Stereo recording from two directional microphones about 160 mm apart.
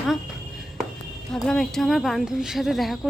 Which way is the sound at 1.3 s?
5° left (ahead or behind).